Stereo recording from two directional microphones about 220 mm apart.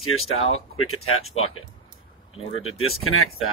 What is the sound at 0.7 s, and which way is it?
Speech, 80° left.